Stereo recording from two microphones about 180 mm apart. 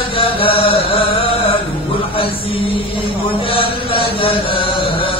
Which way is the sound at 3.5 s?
30° left (ahead or behind).